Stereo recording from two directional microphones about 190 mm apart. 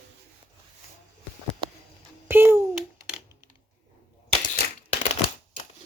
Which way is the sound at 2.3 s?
10° right (ahead or behind).